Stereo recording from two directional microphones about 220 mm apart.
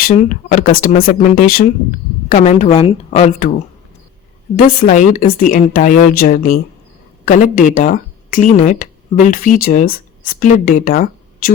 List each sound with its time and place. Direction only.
0.0 s a woman's voice: 40° left (ahead or behind)
4.5 s a woman's voice: 35° left (ahead or behind)